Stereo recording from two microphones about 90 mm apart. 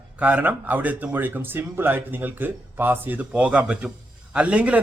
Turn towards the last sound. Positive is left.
turn(degrees=-15)  # may be behind; listen again after turning